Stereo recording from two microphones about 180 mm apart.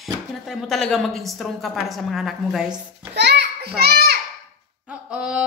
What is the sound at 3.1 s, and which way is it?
A child's voice, 70° right (ahead or behind).